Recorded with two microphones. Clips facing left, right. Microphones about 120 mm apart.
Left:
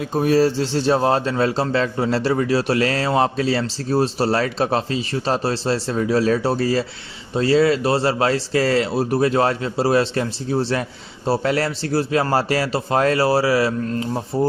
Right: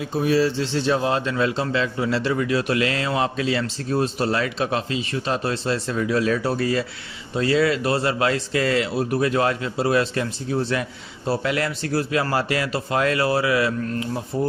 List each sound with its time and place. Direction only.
0.0 s a man's voice: 45° left (ahead or behind)